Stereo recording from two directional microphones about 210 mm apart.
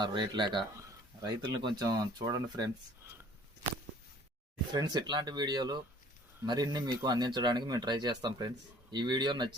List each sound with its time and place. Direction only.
0.0 s speech: 20° right (ahead or behind)
4.7 s speech: 20° right (ahead or behind)